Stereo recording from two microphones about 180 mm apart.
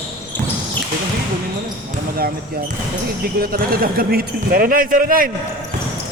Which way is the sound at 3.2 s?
55° right (ahead or behind).